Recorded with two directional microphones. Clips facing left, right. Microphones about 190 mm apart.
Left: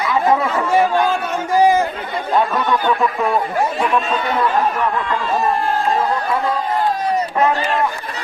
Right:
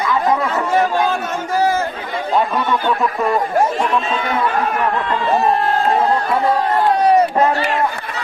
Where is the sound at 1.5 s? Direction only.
15° left (ahead or behind).